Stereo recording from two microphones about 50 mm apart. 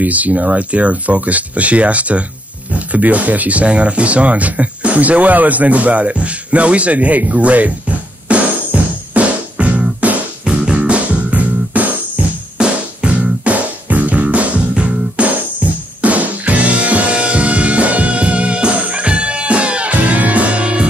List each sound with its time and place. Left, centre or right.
0.0 s speech: right
8.3 s music: right